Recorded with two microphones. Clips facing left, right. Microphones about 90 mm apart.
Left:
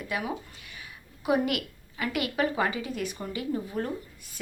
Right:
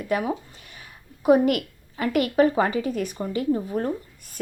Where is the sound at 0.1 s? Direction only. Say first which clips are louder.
Right 8 dB; 40° right (ahead or behind).